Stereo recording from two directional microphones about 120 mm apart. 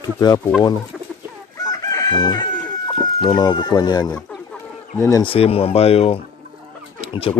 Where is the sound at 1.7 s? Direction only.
35° left (ahead or behind).